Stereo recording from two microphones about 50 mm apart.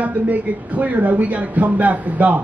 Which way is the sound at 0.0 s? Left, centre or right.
Right.